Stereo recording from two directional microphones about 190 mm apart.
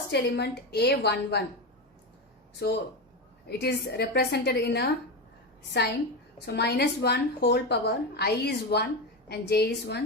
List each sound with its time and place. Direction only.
0.1 s a woman's voice: 60° left (ahead or behind)
2.6 s a woman's voice: 60° left (ahead or behind)